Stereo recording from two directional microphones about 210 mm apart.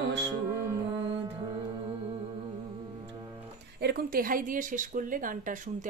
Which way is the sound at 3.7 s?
50° right (ahead or behind).